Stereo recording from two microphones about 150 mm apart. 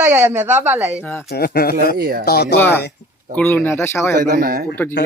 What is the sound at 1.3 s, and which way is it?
Speech, 90° left.